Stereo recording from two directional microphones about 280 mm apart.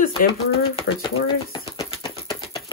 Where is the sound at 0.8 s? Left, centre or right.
Centre.